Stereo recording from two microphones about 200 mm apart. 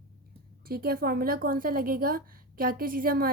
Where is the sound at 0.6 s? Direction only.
50° right (ahead or behind).